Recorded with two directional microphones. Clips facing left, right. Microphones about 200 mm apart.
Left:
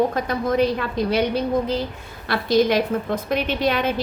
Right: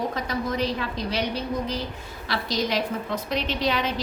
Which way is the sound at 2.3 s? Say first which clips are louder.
Left 8 dB; 55° left (ahead or behind).